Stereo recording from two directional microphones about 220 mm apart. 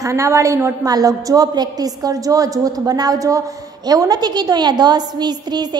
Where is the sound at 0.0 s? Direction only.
15° right (ahead or behind).